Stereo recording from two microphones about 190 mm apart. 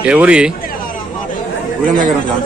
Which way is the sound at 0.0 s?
5° right (ahead or behind).